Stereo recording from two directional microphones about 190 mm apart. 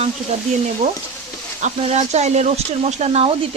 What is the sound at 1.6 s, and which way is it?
Speech, 35° right (ahead or behind).